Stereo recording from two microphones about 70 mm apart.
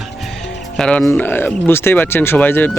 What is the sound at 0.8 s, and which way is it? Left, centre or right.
Speech, centre.